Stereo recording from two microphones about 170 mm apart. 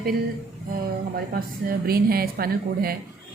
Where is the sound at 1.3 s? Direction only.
60° right (ahead or behind).